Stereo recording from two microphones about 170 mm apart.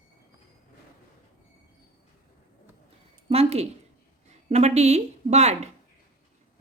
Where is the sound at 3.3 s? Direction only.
35° right (ahead or behind).